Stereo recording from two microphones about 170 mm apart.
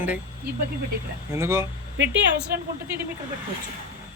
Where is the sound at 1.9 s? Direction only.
90° right.